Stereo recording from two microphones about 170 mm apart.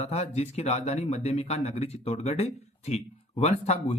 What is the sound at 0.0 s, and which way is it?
Speech, 40° left (ahead or behind).